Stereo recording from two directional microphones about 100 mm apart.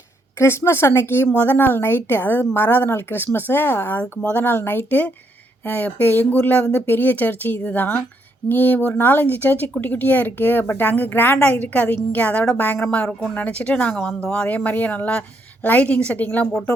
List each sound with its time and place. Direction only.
0.3 s a woman's voice: 25° left (ahead or behind)